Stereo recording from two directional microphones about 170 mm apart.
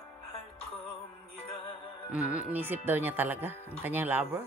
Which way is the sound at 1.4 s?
35° left (ahead or behind).